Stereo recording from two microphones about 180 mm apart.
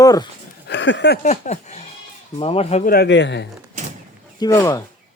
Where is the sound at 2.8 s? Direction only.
60° left (ahead or behind); by 3.4 s 80° left.